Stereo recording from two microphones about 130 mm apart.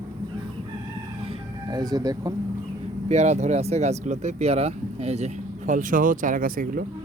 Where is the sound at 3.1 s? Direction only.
60° right (ahead or behind); by 6.8 s 90° right.